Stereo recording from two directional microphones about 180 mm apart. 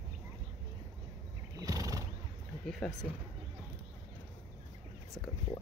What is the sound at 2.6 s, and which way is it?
Speech, 5° left (ahead or behind).